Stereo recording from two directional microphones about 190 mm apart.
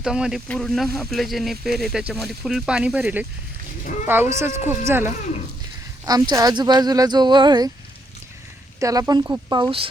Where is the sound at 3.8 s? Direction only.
45° left (ahead or behind).